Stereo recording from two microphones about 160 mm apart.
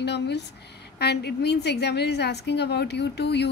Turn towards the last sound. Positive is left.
turn(degrees=90)